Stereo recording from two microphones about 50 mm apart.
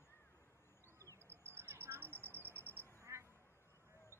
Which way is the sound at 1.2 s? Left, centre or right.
Right.